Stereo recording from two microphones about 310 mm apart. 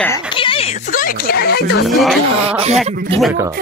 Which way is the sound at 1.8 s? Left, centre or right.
Centre.